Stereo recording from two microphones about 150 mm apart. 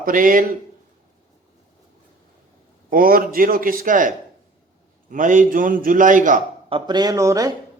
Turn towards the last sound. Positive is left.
turn(degrees=-20)  # may be behind; listen again after turning